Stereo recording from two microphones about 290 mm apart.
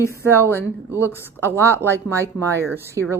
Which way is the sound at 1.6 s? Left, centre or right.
Centre.